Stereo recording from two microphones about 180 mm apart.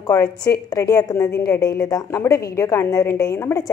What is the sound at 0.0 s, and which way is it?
A woman's voice, 20° left (ahead or behind).